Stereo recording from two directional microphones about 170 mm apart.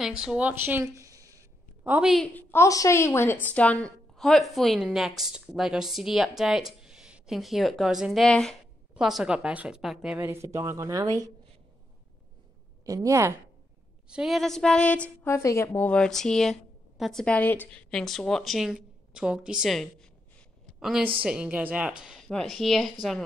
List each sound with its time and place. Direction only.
0.0 s a woman's voice: 5° right (ahead or behind); by 1.4 s 20° right (ahead or behind)
1.9 s a woman's voice: 5° right (ahead or behind)
2.3 s a woman's voice: 15° left (ahead or behind); by 10.1 s 5° right (ahead or behind)
10.1 s speech: 15° right (ahead or behind)
12.8 s a woman's voice: 20° right (ahead or behind)
14.0 s a woman's voice: 5° right (ahead or behind)